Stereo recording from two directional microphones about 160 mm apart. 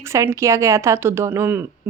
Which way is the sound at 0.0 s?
15° right (ahead or behind).